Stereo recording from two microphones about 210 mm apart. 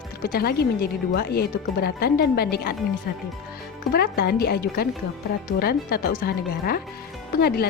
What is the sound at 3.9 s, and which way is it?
Speech, 45° left (ahead or behind).